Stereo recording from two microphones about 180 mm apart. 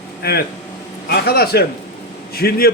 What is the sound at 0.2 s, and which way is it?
A man's voice, 60° left (ahead or behind).